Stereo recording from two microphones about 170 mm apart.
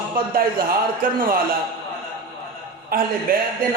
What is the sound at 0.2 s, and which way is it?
A man's voice, 60° right (ahead or behind).